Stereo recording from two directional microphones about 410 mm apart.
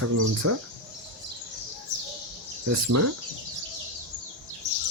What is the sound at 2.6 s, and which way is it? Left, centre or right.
Speech, right.